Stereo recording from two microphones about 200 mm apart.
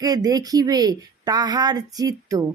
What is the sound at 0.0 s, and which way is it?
A woman's voice, 20° right (ahead or behind).